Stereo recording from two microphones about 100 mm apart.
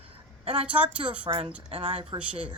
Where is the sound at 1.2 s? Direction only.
65° right (ahead or behind).